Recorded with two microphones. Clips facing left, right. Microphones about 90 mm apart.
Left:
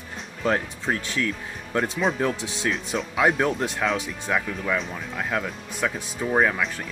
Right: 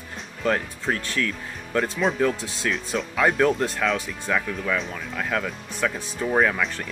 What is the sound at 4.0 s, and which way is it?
Speech, 15° left (ahead or behind).